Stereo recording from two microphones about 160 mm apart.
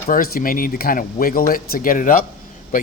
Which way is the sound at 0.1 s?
65° left (ahead or behind).